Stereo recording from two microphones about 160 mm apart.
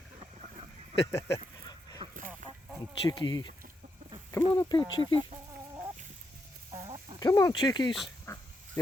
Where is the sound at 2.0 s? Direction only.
35° right (ahead or behind).